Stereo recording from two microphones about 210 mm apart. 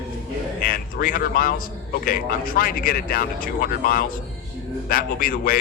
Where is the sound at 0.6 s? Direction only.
45° left (ahead or behind).